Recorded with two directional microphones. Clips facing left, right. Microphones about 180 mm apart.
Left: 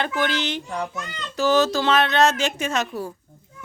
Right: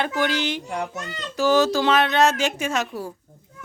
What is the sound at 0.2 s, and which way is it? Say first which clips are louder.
Speech: right 1 dB; 10° right (ahead or behind).